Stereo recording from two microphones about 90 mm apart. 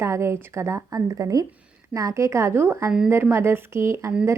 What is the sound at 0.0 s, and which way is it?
A woman's voice, 30° right (ahead or behind).